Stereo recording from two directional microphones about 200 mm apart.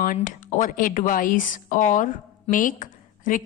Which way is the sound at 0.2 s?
40° left (ahead or behind).